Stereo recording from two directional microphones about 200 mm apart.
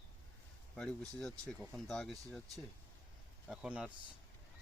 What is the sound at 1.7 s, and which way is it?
Speech, centre (ahead or behind).